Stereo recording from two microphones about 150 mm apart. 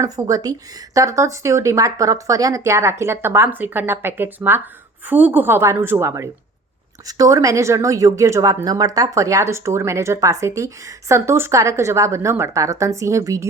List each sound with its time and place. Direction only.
0.0 s speech: 25° right (ahead or behind)